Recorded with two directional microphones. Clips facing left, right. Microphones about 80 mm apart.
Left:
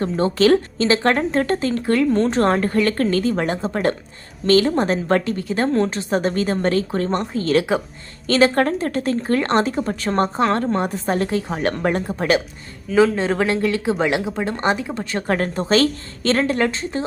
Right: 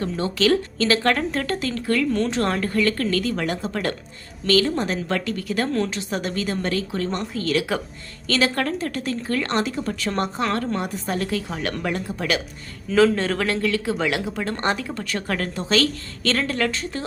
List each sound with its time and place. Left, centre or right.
0.0 s speech: left
12.9 s speech: centre
13.1 s speech: centre